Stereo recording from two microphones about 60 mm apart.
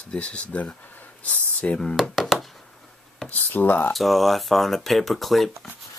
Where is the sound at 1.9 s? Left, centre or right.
Centre.